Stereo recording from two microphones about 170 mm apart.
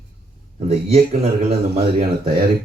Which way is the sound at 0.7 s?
35° right (ahead or behind).